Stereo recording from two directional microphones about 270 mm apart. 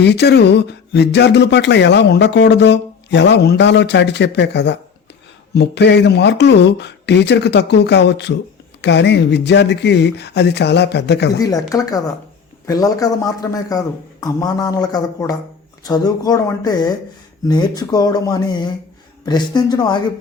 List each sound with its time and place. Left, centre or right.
0.0 s speech: left
11.3 s a man's voice: centre